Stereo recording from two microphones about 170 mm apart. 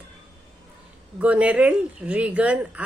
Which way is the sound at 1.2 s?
10° right (ahead or behind).